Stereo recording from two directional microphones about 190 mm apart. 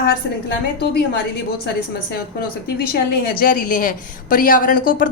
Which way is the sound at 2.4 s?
55° left (ahead or behind).